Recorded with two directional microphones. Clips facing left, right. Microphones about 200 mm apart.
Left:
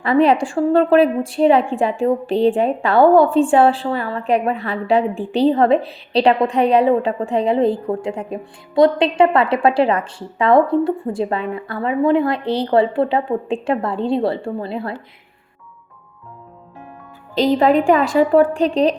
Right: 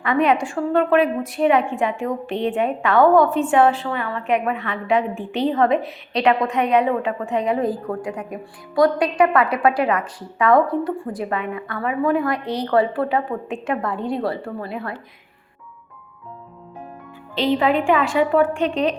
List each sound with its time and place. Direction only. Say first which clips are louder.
0.0 s a woman's voice: left 4 dB; 30° left (ahead or behind)
17.3 s a woman's voice: left 4 dB; 40° left (ahead or behind)